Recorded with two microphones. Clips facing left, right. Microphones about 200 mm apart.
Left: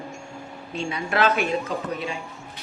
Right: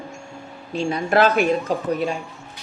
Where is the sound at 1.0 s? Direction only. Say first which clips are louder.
Right 5 dB; 45° right (ahead or behind).